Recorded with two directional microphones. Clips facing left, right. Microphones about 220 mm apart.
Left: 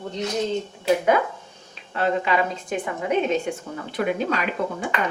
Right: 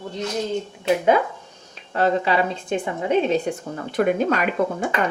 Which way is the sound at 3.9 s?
45° right (ahead or behind).